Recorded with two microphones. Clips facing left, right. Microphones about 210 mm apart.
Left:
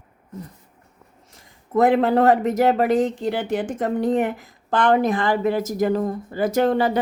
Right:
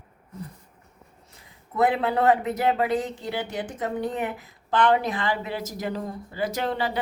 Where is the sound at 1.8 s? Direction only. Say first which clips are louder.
Left 6 dB; 45° left (ahead or behind).